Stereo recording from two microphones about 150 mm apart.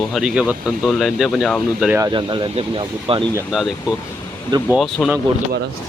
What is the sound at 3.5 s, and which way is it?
Speech, centre (ahead or behind).